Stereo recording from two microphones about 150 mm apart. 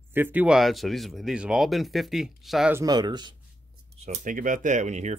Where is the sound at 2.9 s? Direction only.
30° right (ahead or behind).